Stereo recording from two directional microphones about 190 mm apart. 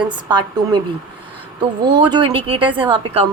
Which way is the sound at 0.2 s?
25° right (ahead or behind).